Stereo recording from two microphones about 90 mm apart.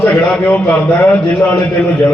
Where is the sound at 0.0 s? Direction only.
20° left (ahead or behind).